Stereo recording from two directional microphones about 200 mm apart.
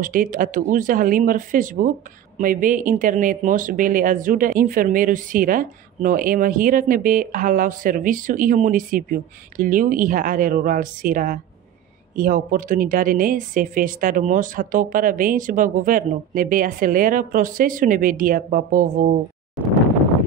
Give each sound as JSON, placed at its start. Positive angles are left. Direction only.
{"t": 0.0, "sound": "speech", "side_deg": -40}